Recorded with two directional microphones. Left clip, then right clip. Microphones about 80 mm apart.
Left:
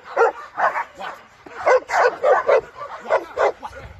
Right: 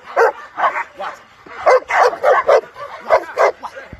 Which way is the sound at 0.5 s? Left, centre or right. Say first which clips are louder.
Right 3 dB; centre.